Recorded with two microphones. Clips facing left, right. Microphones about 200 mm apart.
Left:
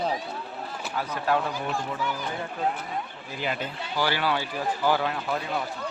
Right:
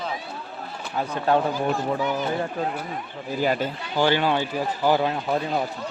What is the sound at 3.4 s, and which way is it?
Speech, 40° right (ahead or behind).